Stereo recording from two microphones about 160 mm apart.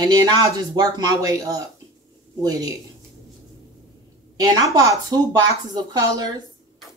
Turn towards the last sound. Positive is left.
turn(degrees=-25)  # may be behind; listen again after turning